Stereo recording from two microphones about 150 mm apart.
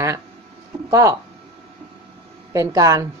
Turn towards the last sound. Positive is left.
turn(degrees=-25)  # may be behind; listen again after turning